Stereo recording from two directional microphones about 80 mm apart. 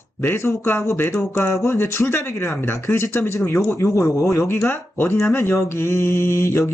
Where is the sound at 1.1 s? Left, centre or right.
Centre.